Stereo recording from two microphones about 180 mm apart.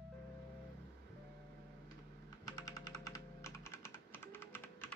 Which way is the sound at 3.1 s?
15° left (ahead or behind).